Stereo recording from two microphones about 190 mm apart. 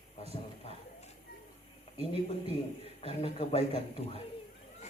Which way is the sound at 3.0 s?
30° left (ahead or behind).